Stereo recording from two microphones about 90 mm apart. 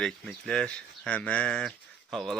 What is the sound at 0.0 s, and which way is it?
Speech, 5° left (ahead or behind).